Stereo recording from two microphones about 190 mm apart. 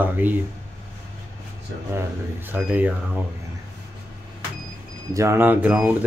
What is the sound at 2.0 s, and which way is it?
Speech, 10° right (ahead or behind).